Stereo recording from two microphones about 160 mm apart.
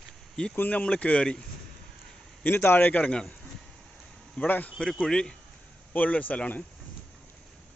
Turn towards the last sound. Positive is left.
turn(degrees=10)  # may be behind; listen again after turning